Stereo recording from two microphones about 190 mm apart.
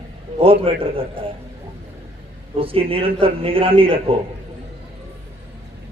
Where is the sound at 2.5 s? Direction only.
30° right (ahead or behind).